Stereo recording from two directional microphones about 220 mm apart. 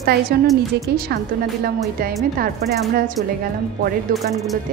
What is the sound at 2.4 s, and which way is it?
A woman's voice, 40° right (ahead or behind).